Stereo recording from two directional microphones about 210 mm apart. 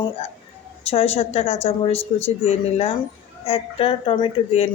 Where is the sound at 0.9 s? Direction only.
30° left (ahead or behind).